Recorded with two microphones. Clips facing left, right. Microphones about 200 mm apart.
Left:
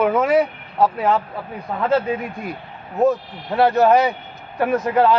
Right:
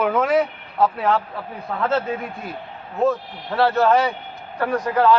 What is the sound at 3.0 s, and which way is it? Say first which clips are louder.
A man's voice: left 3 dB; 15° left (ahead or behind).